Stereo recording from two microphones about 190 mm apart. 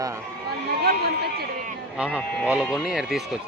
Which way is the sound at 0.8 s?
55° right (ahead or behind).